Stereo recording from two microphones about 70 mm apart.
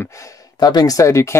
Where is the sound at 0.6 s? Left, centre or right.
Left.